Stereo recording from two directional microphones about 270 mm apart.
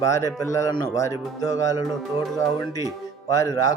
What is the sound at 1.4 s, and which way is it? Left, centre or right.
Speech, centre.